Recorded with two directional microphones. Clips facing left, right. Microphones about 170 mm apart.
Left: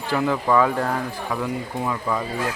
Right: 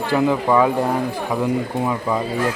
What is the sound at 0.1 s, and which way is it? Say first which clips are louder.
Speech: right 3 dB; 15° right (ahead or behind).